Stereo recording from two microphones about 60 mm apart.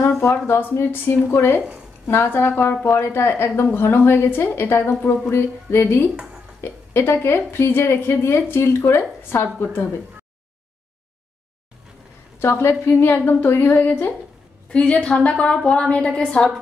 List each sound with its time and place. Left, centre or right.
0.5 s a woman's voice: left
12.4 s a woman's voice: left
14.7 s a woman's voice: centre